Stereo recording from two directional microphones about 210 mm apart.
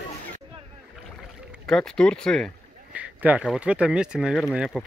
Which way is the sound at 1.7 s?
Centre (ahead or behind).